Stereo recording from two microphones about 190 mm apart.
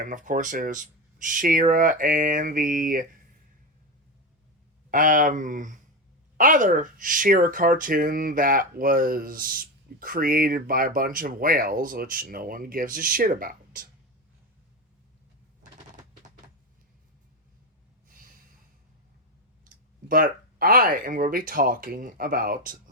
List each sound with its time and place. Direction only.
0.0 s speech: 45° right (ahead or behind)
4.9 s speech: 45° right (ahead or behind)
19.6 s speech: 45° right (ahead or behind)